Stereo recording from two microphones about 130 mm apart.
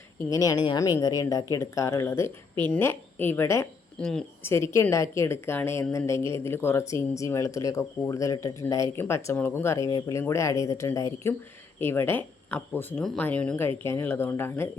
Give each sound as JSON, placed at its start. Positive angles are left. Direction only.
{"t": 0.3, "sound": "speech", "side_deg": 25}
{"t": 4.0, "sound": "speech", "side_deg": 5}
{"t": 4.4, "sound": "a woman's voice", "side_deg": 20}